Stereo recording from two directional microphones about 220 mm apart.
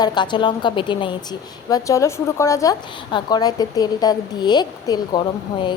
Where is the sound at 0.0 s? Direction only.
20° left (ahead or behind).